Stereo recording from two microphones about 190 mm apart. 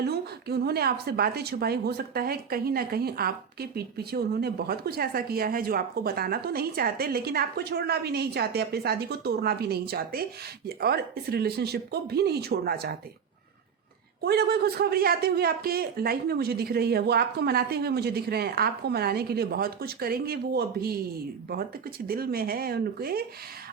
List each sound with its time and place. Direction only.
0.0 s a woman's voice: 55° right (ahead or behind)
14.2 s a woman's voice: 55° right (ahead or behind)
22.0 s speech: 50° right (ahead or behind)